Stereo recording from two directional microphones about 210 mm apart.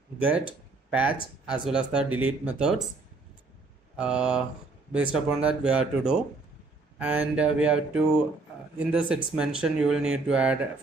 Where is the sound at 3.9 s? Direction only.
5° right (ahead or behind).